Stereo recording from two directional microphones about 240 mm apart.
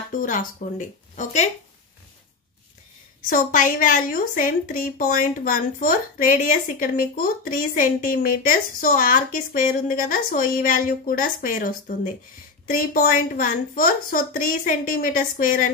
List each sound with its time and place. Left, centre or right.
0.1 s a woman's voice: left
3.2 s a woman's voice: left